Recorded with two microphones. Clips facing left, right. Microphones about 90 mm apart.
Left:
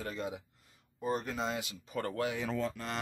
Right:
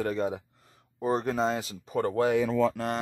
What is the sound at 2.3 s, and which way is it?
Speech, 55° right (ahead or behind).